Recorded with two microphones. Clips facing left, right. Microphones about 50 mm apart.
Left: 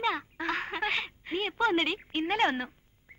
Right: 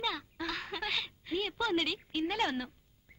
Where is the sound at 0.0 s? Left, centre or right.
Left.